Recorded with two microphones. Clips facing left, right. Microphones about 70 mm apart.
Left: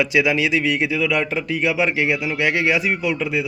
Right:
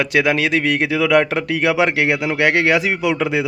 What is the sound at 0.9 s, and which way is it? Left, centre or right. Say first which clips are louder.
Speech: right 5 dB; right.